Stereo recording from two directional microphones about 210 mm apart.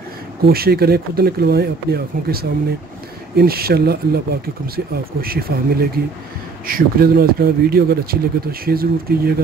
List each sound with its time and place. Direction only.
0.5 s speech: 45° right (ahead or behind)